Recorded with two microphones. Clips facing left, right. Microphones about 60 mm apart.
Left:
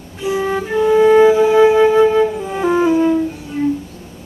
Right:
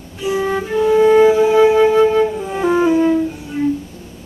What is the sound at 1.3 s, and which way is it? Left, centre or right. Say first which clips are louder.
Wind instrument: left 1 dB; centre.